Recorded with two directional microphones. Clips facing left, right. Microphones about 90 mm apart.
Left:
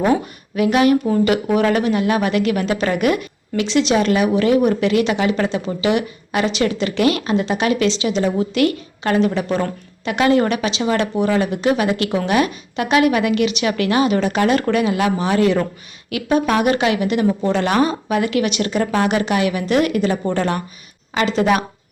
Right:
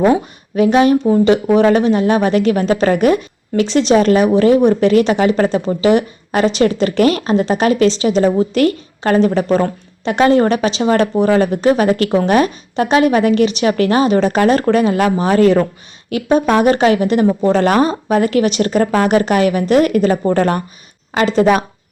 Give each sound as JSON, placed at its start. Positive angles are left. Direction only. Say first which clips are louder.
{"t": 0.0, "sound": "speech", "louder": "right 4 dB", "side_deg": -30}